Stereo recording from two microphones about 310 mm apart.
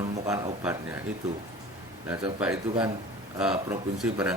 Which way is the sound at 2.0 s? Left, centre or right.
Centre.